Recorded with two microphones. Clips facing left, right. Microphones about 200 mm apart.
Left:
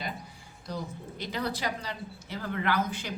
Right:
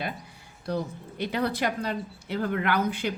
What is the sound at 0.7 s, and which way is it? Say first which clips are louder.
A woman's voice: right 6 dB; 60° right (ahead or behind).